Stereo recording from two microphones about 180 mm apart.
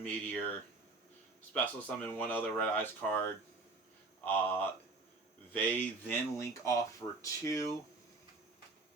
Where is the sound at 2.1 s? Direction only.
10° left (ahead or behind).